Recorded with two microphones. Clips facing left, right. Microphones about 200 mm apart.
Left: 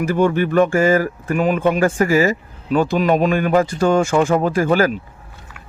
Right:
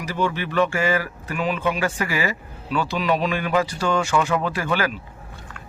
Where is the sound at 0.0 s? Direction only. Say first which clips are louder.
Left 9 dB; 50° left (ahead or behind).